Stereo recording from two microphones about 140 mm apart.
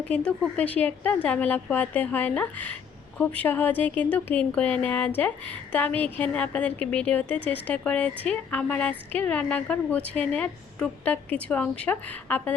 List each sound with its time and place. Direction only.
0.1 s a woman's voice: 5° left (ahead or behind)